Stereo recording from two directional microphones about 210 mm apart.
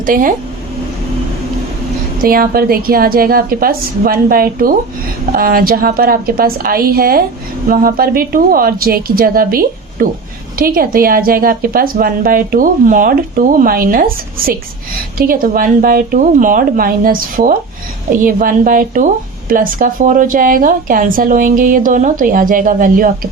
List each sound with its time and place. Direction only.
0.0 s a woman's voice: 40° right (ahead or behind)
2.2 s a woman's voice: 45° right (ahead or behind)